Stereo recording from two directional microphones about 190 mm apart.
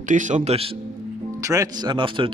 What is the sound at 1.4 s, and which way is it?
Speech, 15° right (ahead or behind).